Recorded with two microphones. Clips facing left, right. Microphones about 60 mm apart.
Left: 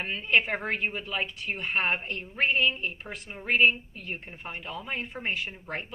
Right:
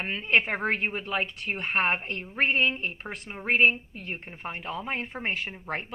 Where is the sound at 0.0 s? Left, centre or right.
Right.